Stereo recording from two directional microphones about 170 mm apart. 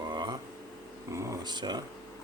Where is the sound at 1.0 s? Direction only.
20° right (ahead or behind).